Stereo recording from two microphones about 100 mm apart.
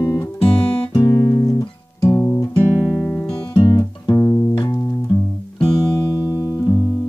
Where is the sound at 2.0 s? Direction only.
30° left (ahead or behind).